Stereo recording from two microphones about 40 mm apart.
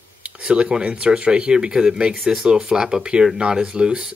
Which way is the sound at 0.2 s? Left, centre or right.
Right.